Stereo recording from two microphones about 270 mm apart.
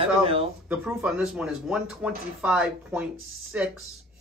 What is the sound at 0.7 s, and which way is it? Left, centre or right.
Speech, centre.